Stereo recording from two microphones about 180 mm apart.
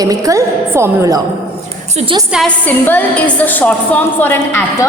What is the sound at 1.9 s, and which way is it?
Speech, 30° right (ahead or behind).